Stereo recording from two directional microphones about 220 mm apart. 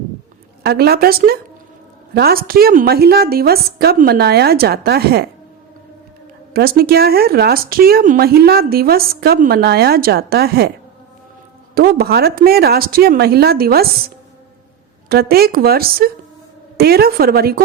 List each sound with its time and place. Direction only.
0.6 s speech: 45° right (ahead or behind)
6.5 s speech: 45° right (ahead or behind)
11.7 s speech: 45° right (ahead or behind)
15.1 s speech: 45° right (ahead or behind)